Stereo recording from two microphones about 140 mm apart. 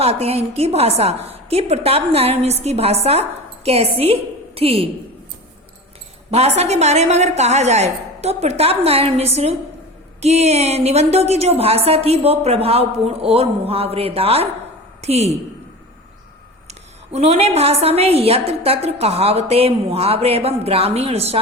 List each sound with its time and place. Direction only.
0.0 s a woman's voice: 45° right (ahead or behind)
6.3 s a woman's voice: 50° right (ahead or behind)
16.6 s a woman's voice: 50° right (ahead or behind)